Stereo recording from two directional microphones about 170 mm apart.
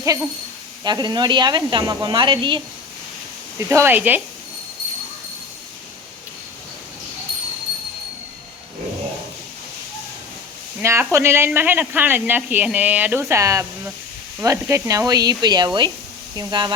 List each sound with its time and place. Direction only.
0.0 s speech: 20° right (ahead or behind)
3.7 s speech: 15° right (ahead or behind)
10.8 s speech: 15° right (ahead or behind)